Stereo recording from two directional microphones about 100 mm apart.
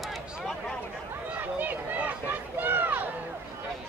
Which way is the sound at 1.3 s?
20° right (ahead or behind).